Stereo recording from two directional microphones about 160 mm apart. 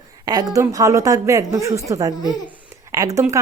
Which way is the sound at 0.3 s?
25° right (ahead or behind).